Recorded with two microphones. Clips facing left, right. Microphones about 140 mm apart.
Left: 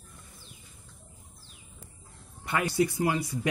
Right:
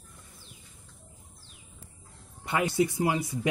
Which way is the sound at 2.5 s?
20° right (ahead or behind).